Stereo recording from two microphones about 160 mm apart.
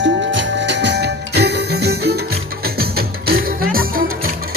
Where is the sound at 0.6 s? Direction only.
90° right.